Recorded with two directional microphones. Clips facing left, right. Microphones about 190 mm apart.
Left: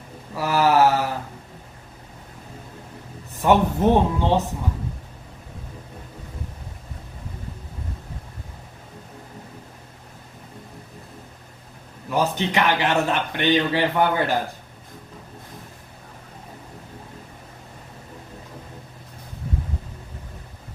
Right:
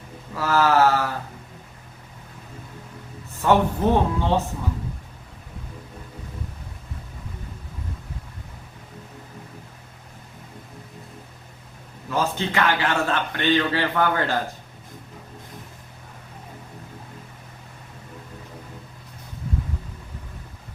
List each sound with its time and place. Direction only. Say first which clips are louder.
0.3 s a man's voice: left 1 dB; 15° left (ahead or behind)
3.4 s a man's voice: left 2 dB; 20° left (ahead or behind)
12.0 s a man's voice: left 2 dB; 15° left (ahead or behind)